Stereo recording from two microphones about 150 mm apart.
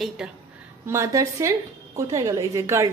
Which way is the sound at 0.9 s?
20° right (ahead or behind).